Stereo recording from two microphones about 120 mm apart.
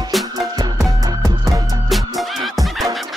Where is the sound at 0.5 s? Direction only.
30° right (ahead or behind).